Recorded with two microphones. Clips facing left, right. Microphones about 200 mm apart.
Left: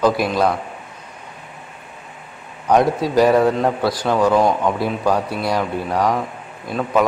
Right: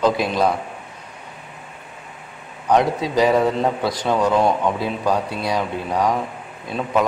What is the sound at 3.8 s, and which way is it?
Speech, 20° right (ahead or behind).